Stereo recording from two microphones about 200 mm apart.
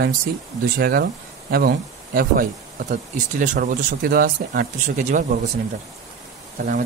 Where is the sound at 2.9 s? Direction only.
45° right (ahead or behind).